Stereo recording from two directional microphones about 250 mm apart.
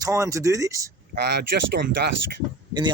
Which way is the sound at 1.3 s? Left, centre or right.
Right.